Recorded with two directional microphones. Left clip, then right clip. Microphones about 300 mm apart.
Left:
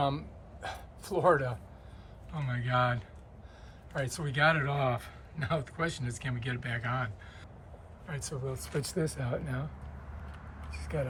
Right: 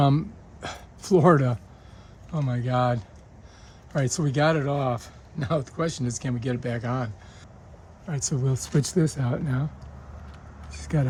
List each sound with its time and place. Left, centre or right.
0.0 s a sound: right
2.3 s speech: centre
3.9 s speech: right
8.1 s speech: right
10.7 s speech: right